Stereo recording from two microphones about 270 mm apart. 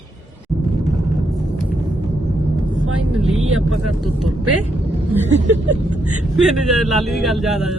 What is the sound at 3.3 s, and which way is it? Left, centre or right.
Speech, right.